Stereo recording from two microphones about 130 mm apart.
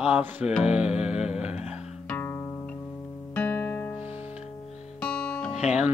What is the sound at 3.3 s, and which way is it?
Music, 15° left (ahead or behind).